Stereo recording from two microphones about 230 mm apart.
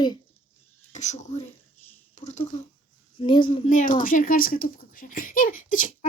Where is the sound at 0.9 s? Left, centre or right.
Left.